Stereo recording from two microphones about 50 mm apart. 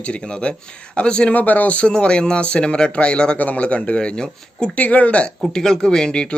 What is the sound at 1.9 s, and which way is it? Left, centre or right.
Speech, centre.